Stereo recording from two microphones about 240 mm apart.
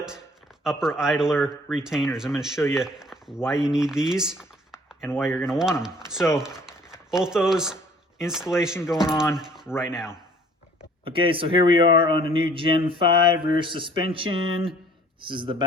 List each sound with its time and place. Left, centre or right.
0.6 s speech: centre
11.0 s a man's voice: right